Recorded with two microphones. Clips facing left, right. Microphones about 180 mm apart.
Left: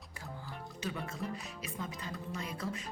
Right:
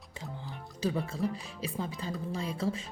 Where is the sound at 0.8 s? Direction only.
30° right (ahead or behind).